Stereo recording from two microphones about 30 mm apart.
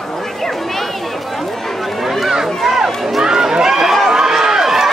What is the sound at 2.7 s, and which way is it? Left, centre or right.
Run, centre.